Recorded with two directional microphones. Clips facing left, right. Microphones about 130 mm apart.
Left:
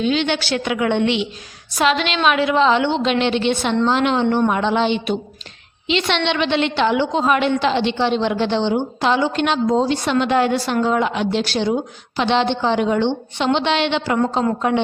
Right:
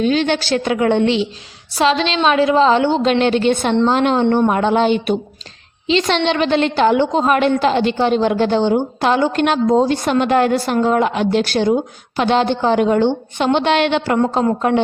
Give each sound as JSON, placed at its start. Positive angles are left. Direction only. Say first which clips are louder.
{"t": 0.0, "sound": "a woman's voice", "louder": "right 3 dB", "side_deg": -40}
{"t": 5.9, "sound": "a woman's voice", "louder": "right 4 dB", "side_deg": -40}